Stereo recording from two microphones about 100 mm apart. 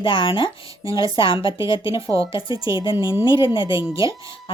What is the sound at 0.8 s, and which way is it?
Speech, 35° right (ahead or behind).